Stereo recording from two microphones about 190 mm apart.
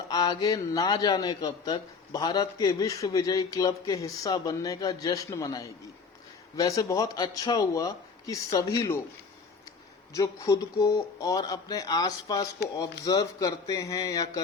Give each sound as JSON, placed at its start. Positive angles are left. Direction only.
{"t": 0.1, "sound": "a man's voice", "side_deg": 20}
{"t": 10.2, "sound": "a man's voice", "side_deg": 15}